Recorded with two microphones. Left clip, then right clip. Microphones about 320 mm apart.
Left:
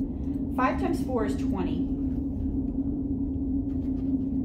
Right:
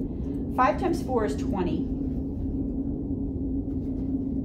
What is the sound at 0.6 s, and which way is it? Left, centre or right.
A woman's voice, right.